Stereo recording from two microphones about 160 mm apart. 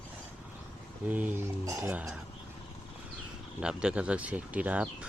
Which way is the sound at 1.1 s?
10° right (ahead or behind).